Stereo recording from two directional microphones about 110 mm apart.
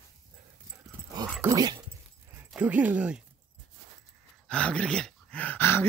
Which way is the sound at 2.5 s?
15° right (ahead or behind).